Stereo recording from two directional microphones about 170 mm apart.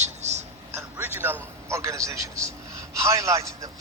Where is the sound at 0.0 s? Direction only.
40° right (ahead or behind).